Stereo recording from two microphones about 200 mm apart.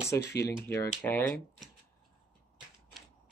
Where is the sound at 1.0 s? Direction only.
10° left (ahead or behind).